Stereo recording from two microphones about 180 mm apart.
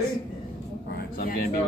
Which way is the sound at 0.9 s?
55° left (ahead or behind).